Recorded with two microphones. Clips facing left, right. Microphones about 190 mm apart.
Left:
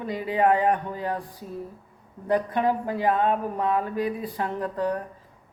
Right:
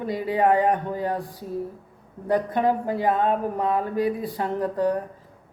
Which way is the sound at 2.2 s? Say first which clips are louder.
Right 2 dB; 35° right (ahead or behind).